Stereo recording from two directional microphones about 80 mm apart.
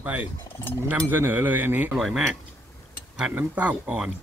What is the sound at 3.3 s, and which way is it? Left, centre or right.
Speech, centre.